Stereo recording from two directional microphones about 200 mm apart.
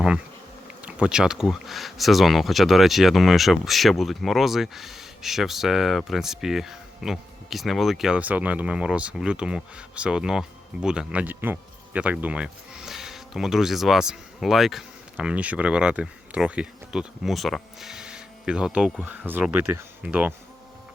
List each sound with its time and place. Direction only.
0.8 s speech: 5° right (ahead or behind)